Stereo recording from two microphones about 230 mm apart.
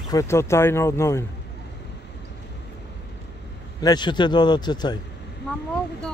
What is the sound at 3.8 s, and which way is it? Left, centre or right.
A man's voice, centre.